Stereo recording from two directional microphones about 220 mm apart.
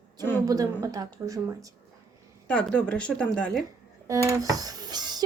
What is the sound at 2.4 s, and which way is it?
Speech, 5° left (ahead or behind).